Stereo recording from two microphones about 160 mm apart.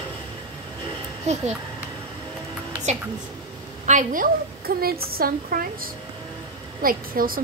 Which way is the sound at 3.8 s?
55° right (ahead or behind).